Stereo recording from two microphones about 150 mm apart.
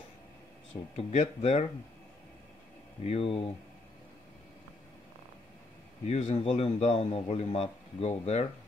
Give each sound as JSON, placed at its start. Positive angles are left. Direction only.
{"t": 0.9, "sound": "a man's voice", "side_deg": 45}
{"t": 3.1, "sound": "speech", "side_deg": 40}
{"t": 6.0, "sound": "a man's voice", "side_deg": 45}